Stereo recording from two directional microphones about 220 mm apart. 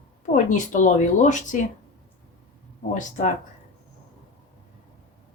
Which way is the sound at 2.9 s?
35° left (ahead or behind).